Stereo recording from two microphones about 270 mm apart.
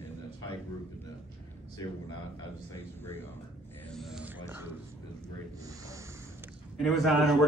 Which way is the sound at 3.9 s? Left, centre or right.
Centre.